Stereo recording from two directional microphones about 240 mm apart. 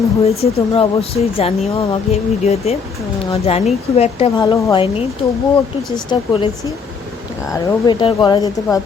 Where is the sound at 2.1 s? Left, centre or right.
Left.